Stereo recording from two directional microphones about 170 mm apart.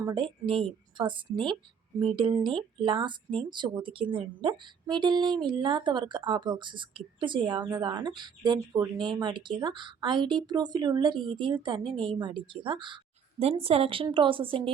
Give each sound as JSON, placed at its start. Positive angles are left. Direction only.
{"t": 0.0, "sound": "a woman's voice", "side_deg": -25}